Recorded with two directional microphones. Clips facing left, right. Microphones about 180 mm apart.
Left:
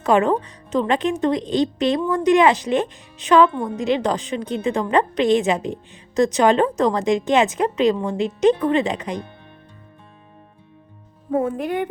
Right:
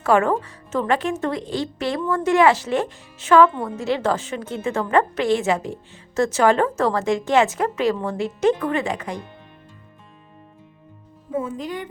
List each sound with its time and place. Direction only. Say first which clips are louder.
0.0 s speech: left 1 dB; 20° left (ahead or behind)
11.3 s speech: left 5 dB; 60° left (ahead or behind)